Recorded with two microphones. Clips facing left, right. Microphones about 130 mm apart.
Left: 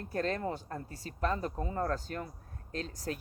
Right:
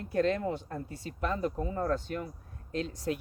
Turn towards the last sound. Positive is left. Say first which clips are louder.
# right 5 dB
turn(degrees=40)  # may be behind; listen again after turning